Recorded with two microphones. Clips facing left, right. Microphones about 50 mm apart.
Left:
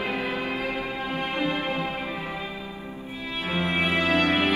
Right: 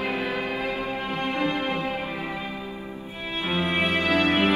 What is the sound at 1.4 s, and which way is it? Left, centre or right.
Music, right.